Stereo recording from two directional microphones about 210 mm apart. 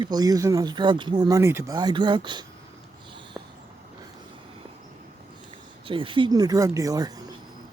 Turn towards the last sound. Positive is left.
turn(degrees=-20)  # may be behind; listen again after turning